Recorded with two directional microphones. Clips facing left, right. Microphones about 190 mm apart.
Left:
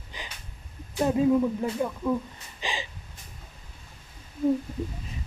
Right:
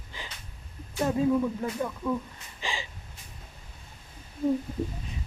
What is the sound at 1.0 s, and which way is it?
Speech, 15° left (ahead or behind).